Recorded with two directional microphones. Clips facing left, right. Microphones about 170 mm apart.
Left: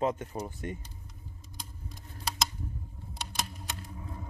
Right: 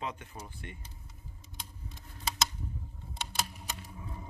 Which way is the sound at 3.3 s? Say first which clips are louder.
Even; 5° right (ahead or behind).